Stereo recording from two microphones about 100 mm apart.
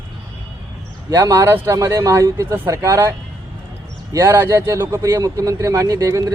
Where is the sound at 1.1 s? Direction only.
30° right (ahead or behind).